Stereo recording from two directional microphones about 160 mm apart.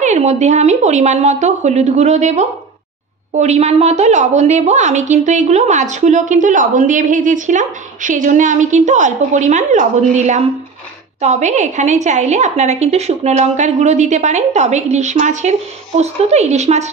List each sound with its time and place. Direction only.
0.0 s a woman's voice: 45° right (ahead or behind)